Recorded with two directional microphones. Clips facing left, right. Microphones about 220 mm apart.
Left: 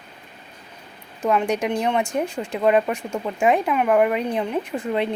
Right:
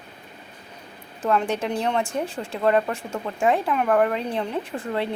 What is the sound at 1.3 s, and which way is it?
Speech, 10° left (ahead or behind).